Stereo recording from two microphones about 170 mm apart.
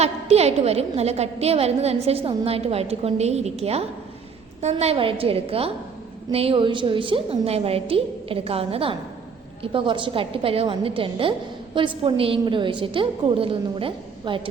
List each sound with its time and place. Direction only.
0.0 s a woman's voice: 40° right (ahead or behind)